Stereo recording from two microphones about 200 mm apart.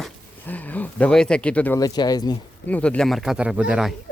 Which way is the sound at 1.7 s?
20° left (ahead or behind).